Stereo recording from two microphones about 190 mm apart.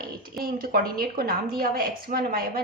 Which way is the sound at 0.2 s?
50° right (ahead or behind).